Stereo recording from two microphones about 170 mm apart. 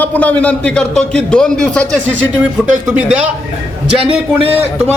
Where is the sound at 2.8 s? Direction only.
5° right (ahead or behind).